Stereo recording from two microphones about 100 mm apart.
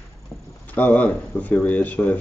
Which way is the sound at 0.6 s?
15° left (ahead or behind).